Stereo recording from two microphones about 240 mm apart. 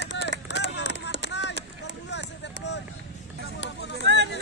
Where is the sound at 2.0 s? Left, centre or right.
Left.